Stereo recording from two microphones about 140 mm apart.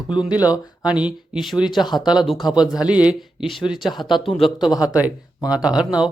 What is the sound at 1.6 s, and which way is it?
Speech, 30° left (ahead or behind).